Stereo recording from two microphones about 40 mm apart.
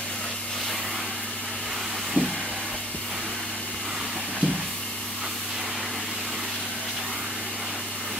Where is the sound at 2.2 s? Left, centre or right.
Right.